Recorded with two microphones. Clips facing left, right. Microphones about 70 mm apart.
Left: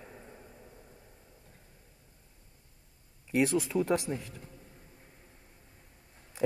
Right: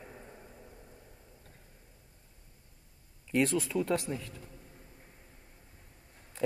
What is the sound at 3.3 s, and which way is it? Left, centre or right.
Speech, centre.